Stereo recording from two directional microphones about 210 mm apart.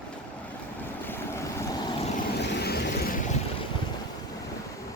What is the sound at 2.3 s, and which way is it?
Vehicle, 55° left (ahead or behind).